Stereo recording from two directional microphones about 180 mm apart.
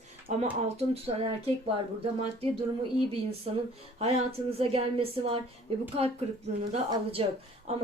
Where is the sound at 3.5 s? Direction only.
35° right (ahead or behind).